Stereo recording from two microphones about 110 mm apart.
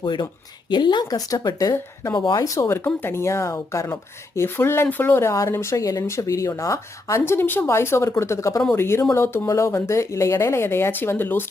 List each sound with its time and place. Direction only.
0.0 s speech: 45° left (ahead or behind)
2.3 s speech: 30° left (ahead or behind)